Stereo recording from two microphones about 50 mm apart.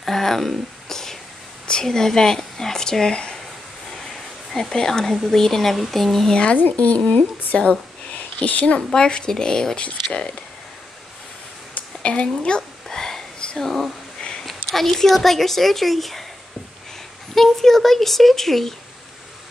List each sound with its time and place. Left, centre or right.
0.0 s a sound: centre
1.7 s speech: centre
4.6 s speech: centre
6.5 s speech: left; by 9.8 s centre
12.0 s speech: left
12.8 s a sound: centre
13.6 s speech: centre
17.3 s speech: centre